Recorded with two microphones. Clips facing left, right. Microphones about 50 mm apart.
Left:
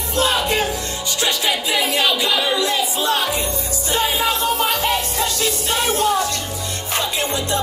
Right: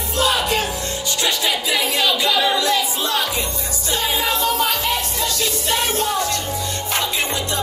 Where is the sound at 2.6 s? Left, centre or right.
Left.